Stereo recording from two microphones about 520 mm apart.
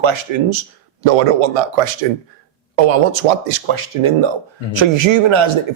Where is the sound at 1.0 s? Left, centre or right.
Right.